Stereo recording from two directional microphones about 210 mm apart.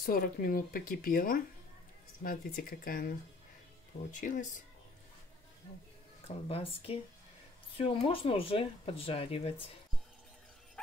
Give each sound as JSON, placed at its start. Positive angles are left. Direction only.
{"t": 0.0, "sound": "speech", "side_deg": 40}
{"t": 4.1, "sound": "speech", "side_deg": 35}
{"t": 6.2, "sound": "speech", "side_deg": 25}